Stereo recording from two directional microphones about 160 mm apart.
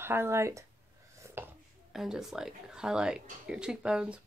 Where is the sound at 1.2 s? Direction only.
15° right (ahead or behind).